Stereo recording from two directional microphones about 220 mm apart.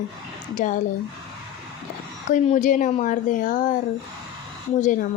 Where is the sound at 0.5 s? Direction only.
35° left (ahead or behind).